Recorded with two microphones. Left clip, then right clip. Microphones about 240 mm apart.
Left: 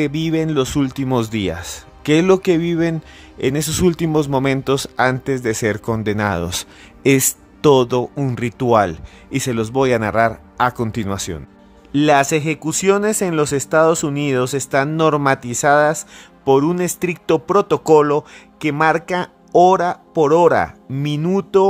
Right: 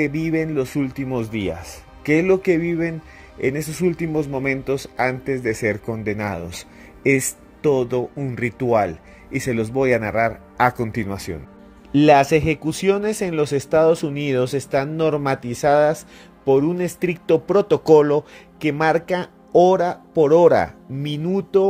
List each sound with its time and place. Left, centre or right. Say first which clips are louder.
0.0 s speech: left 2 dB; centre
11.9 s speech: right 1 dB; centre